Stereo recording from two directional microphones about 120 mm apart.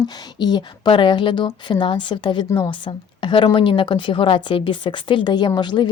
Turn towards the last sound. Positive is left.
turn(degrees=40)  # may be behind; listen again after turning